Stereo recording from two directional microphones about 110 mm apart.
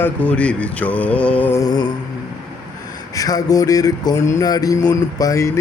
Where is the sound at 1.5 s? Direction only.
35° left (ahead or behind).